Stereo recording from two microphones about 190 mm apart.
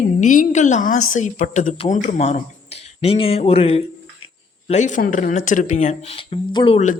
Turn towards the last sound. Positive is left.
turn(degrees=25)  # may be behind; listen again after turning